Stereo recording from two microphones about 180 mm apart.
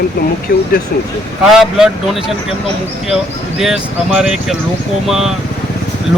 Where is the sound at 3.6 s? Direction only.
5° right (ahead or behind).